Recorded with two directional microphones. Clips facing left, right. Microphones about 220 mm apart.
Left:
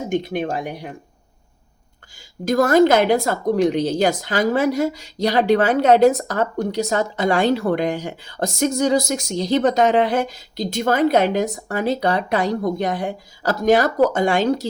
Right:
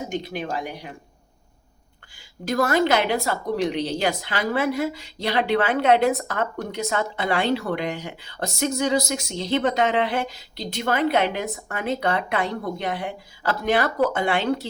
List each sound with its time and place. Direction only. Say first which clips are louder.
0.1 s speech: left 6 dB; 50° left (ahead or behind)
2.1 s speech: left 5 dB; 45° left (ahead or behind)